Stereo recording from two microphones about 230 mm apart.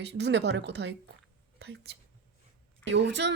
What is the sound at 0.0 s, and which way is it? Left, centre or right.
Speech, right.